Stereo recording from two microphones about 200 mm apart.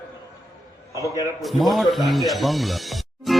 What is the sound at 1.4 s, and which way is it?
Music, centre (ahead or behind).